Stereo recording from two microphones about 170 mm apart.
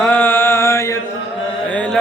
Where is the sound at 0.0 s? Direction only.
10° left (ahead or behind).